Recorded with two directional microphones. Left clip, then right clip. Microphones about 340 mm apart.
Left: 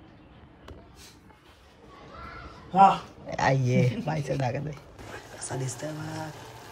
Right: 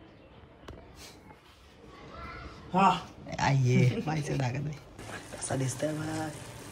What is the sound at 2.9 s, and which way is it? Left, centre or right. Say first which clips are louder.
A man's voice: left 3 dB; centre.